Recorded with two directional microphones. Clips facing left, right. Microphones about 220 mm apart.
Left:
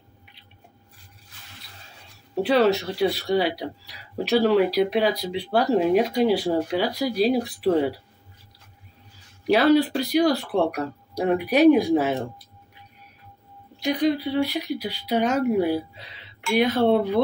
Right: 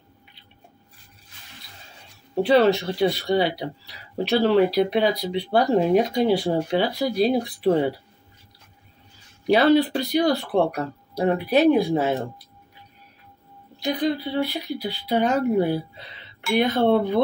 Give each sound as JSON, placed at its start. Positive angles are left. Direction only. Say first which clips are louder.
{"t": 2.4, "sound": "speech", "louder": "right 2 dB", "side_deg": 5}
{"t": 9.5, "sound": "speech", "louder": "right 1 dB", "side_deg": 5}
{"t": 14.0, "sound": "speech", "louder": "left 2 dB", "side_deg": 10}